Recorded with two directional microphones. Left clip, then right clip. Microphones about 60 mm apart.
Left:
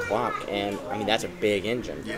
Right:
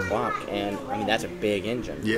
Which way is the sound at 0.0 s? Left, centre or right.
Centre.